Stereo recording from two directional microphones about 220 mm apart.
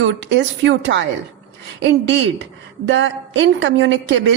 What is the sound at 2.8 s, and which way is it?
A woman's voice, 55° right (ahead or behind).